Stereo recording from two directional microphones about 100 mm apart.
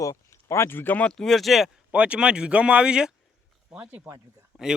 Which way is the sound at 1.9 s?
10° right (ahead or behind).